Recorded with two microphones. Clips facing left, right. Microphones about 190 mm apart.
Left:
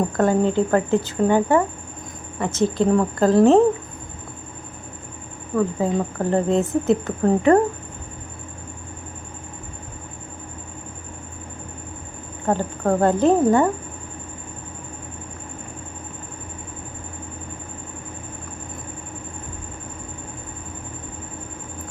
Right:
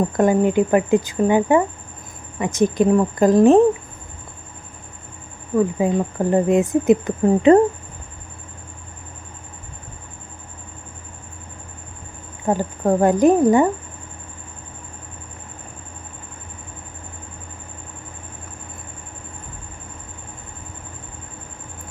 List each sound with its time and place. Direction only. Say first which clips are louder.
0.2 s speech: right 2 dB; 15° right (ahead or behind)
5.5 s speech: right 3 dB; 15° right (ahead or behind)
12.5 s speech: right 2 dB; 10° right (ahead or behind)